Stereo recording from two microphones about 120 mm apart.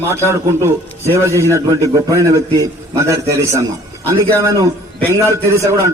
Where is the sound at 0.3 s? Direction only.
20° right (ahead or behind).